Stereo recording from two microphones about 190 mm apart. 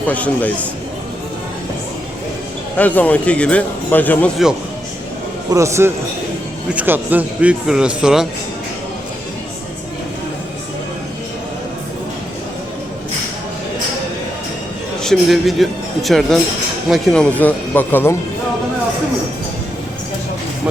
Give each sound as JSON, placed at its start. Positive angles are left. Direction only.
{"t": 0.1, "sound": "speech", "side_deg": 10}
{"t": 2.7, "sound": "speech", "side_deg": 10}
{"t": 5.5, "sound": "a man's voice", "side_deg": -15}
{"t": 15.0, "sound": "speech", "side_deg": 0}